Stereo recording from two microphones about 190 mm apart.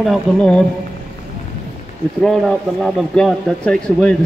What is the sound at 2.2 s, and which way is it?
Speech, centre (ahead or behind).